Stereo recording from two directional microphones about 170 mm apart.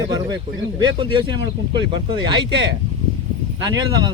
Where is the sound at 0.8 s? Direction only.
25° right (ahead or behind).